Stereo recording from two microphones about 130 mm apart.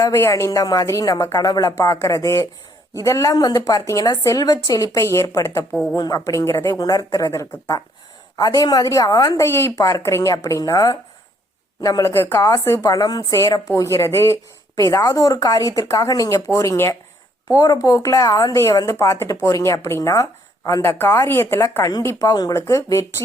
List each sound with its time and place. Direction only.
0.0 s a woman's voice: 25° left (ahead or behind)